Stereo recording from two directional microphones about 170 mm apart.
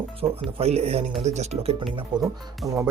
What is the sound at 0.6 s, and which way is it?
Speech, 35° right (ahead or behind).